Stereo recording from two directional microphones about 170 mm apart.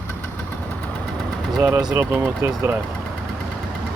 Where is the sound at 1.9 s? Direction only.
15° right (ahead or behind).